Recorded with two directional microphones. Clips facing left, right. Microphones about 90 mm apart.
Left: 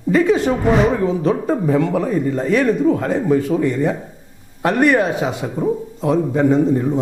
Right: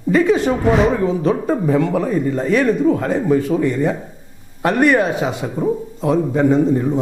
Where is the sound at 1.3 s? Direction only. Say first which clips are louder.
Even; 25° right (ahead or behind).